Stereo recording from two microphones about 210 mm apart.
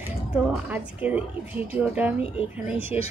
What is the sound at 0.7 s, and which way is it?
Speech, 10° right (ahead or behind).